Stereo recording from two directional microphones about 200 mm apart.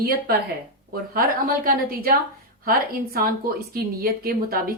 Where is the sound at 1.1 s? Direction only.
45° right (ahead or behind).